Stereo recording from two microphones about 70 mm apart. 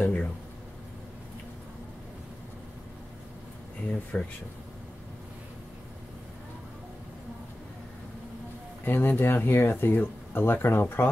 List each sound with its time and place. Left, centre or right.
0.0 s a sound: centre
4.1 s speech: centre
8.8 s speech: left